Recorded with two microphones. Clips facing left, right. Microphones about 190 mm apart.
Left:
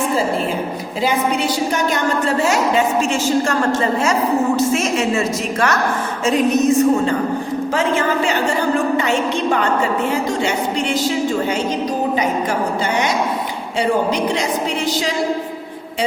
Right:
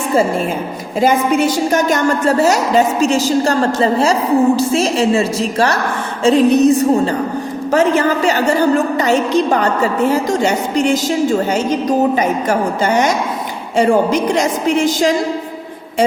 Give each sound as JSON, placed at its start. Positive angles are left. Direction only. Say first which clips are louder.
{"t": 1.0, "sound": "a woman's voice", "louder": "right 5 dB", "side_deg": -45}
{"t": 12.1, "sound": "a woman's voice", "louder": "right 3 dB", "side_deg": -45}